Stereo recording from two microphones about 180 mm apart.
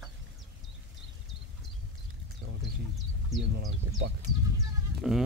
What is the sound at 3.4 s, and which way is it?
Speech, 70° right (ahead or behind).